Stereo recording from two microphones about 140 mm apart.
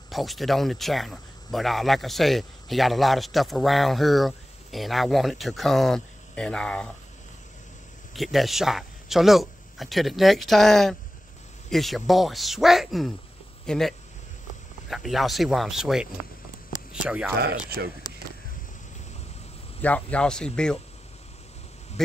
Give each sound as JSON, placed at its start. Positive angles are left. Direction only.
{"t": 0.1, "sound": "speech", "side_deg": 0}
{"t": 8.1, "sound": "speech", "side_deg": 0}
{"t": 19.8, "sound": "speech", "side_deg": 10}